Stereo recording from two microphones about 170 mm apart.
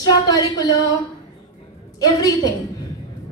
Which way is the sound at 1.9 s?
20° left (ahead or behind).